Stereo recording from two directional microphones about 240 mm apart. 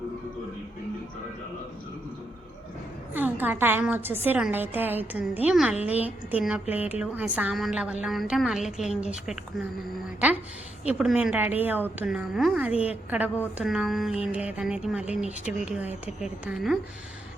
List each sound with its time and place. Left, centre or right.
3.2 s a woman's voice: centre
10.8 s a woman's voice: centre